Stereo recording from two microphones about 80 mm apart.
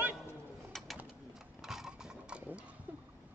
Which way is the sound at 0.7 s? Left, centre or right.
Centre.